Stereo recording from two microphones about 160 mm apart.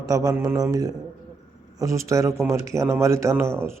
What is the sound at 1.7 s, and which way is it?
A man's voice, 20° right (ahead or behind).